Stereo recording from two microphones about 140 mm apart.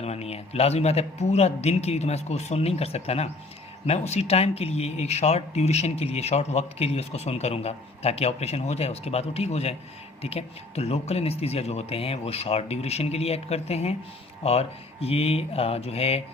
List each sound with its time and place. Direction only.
0.0 s speech: 50° left (ahead or behind)